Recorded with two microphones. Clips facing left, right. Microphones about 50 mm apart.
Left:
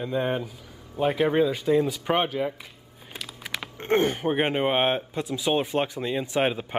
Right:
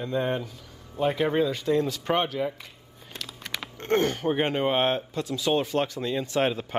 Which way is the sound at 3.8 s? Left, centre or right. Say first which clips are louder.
Left 1 dB; centre.